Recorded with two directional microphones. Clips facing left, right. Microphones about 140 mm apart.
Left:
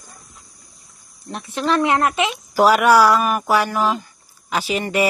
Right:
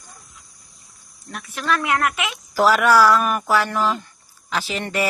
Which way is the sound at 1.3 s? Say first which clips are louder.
Left 4 dB; 25° left (ahead or behind).